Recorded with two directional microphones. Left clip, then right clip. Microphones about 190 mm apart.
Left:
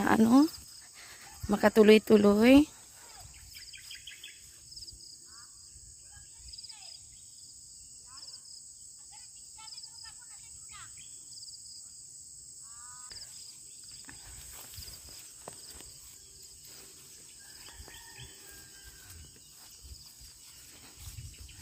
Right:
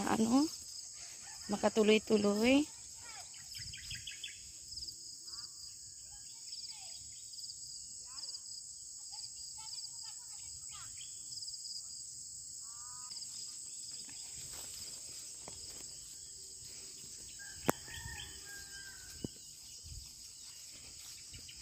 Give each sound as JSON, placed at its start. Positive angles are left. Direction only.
{"t": 0.0, "sound": "speech", "side_deg": 40}
{"t": 1.5, "sound": "cricket", "side_deg": 45}